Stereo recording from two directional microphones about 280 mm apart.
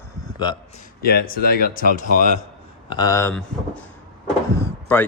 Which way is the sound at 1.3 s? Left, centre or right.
Left.